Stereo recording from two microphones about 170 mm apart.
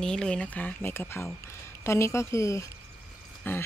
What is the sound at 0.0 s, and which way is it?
A woman's voice, 5° left (ahead or behind).